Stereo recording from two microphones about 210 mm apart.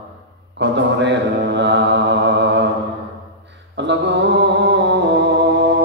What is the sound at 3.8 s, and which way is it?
Mantra, 55° right (ahead or behind).